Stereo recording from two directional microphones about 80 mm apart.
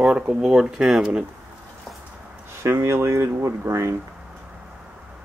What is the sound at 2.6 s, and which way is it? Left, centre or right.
Speech, right.